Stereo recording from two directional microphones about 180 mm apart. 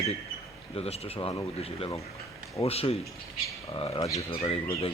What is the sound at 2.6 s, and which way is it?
Speech, 35° left (ahead or behind).